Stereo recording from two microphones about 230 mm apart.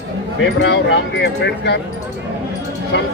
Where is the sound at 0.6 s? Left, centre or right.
Left.